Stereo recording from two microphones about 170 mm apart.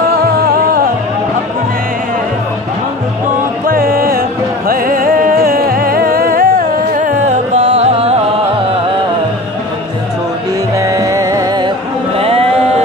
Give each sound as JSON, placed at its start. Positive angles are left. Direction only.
{"t": 0.1, "sound": "music", "side_deg": -60}
{"t": 3.6, "sound": "music", "side_deg": -60}
{"t": 7.7, "sound": "music", "side_deg": -35}
{"t": 10.8, "sound": "music", "side_deg": -20}
{"t": 12.2, "sound": "music", "side_deg": -35}